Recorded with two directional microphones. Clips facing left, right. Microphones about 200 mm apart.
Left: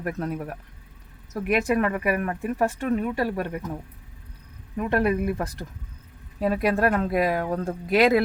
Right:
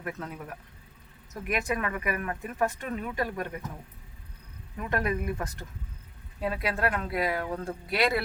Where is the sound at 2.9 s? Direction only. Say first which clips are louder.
Left 7 dB; 35° left (ahead or behind).